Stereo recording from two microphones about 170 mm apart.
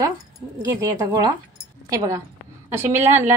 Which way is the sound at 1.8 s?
20° right (ahead or behind).